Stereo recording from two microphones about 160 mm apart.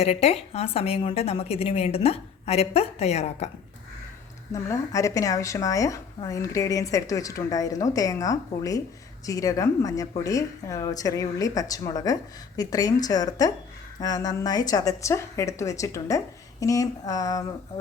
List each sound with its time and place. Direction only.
0.0 s a woman's voice: 40° left (ahead or behind)
4.5 s a woman's voice: 20° left (ahead or behind)